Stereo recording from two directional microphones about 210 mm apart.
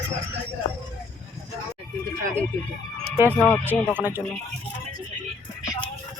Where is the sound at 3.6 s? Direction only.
10° right (ahead or behind).